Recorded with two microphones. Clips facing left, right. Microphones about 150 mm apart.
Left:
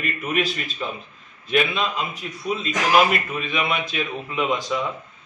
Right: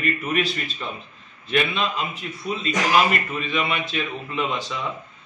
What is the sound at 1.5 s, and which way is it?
A man's voice, 5° left (ahead or behind).